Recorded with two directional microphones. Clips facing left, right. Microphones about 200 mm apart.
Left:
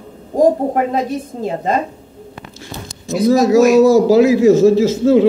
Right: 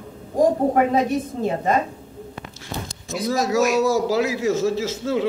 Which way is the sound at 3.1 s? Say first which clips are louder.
Left 10 dB; 35° left (ahead or behind).